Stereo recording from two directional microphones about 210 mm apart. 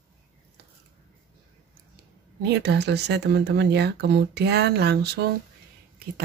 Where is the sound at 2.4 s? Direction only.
50° right (ahead or behind).